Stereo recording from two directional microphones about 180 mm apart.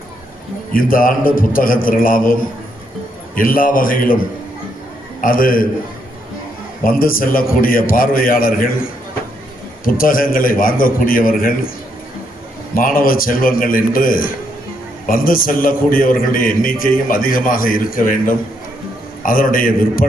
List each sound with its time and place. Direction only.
0.7 s a man's voice: 50° left (ahead or behind)
5.2 s a man's voice: 50° left (ahead or behind)
6.8 s a man's voice: 50° left (ahead or behind)
12.7 s a man's voice: 50° left (ahead or behind)